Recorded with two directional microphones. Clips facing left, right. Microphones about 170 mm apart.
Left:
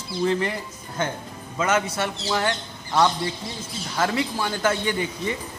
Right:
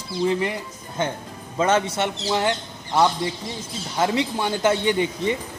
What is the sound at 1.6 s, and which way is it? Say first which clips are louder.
Speech: right 3 dB; 30° right (ahead or behind).